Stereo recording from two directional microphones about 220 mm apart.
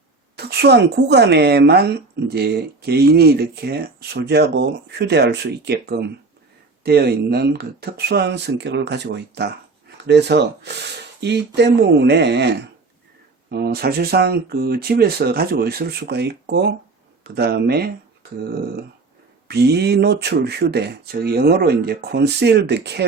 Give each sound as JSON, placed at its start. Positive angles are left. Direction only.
{"t": 0.3, "sound": "speech", "side_deg": -45}
{"t": 19.5, "sound": "speech", "side_deg": -50}